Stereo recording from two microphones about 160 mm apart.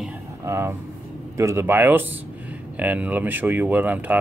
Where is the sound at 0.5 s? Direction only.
15° right (ahead or behind).